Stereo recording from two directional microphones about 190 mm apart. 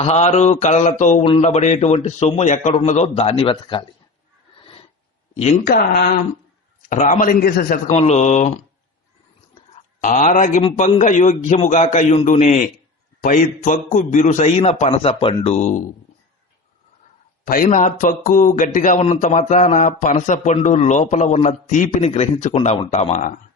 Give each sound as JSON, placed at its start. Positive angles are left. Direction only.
{"t": 0.0, "sound": "speech", "side_deg": 35}
{"t": 4.6, "sound": "a sound", "side_deg": 30}
{"t": 5.3, "sound": "speech", "side_deg": 35}
{"t": 5.6, "sound": "speech", "side_deg": 55}
{"t": 6.9, "sound": "speech", "side_deg": 40}
{"t": 10.0, "sound": "speech", "side_deg": 40}
{"t": 10.6, "sound": "speech", "side_deg": 30}
{"t": 17.4, "sound": "speech", "side_deg": 45}